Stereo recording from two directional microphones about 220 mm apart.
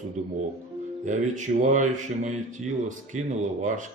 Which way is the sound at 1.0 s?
35° right (ahead or behind).